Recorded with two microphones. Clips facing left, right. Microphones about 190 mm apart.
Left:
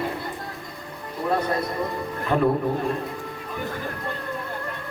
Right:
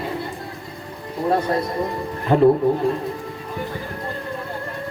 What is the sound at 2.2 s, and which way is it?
Speech, 25° right (ahead or behind).